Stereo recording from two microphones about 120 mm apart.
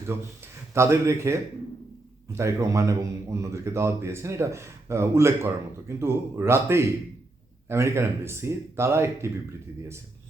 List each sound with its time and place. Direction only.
0.7 s speech: 25° right (ahead or behind)